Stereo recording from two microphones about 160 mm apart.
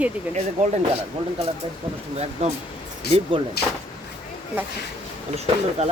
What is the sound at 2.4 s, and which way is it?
Speech, 45° right (ahead or behind).